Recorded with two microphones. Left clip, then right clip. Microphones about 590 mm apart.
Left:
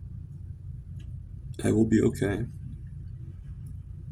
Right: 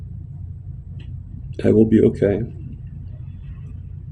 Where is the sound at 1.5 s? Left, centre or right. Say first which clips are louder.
Right 10 dB; left.